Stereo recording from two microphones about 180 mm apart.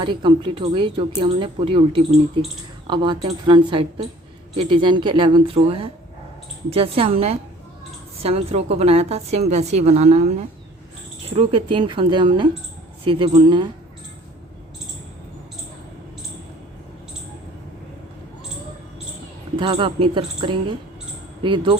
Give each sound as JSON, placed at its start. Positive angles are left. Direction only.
{"t": 0.0, "sound": "a woman's voice", "side_deg": -25}
{"t": 19.5, "sound": "speech", "side_deg": -30}